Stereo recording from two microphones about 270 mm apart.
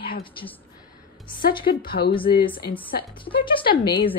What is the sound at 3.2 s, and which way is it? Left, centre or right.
Speech, centre.